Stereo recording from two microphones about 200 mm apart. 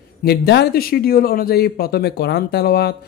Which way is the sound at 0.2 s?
55° left (ahead or behind).